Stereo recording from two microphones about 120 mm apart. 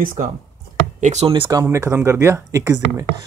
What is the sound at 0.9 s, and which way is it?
Speech, 90° right.